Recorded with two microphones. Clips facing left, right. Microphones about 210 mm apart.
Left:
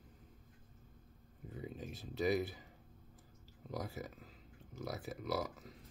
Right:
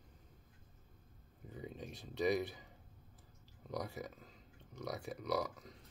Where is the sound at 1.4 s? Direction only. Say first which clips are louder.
Left 1 dB; centre (ahead or behind).